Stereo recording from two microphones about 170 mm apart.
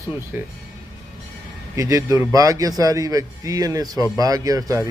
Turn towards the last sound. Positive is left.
turn(degrees=-20)  # may be behind; listen again after turning